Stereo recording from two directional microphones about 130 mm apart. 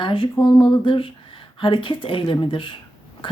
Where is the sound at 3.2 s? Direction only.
40° left (ahead or behind).